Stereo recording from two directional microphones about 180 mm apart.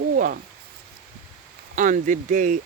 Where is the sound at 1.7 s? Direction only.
45° right (ahead or behind).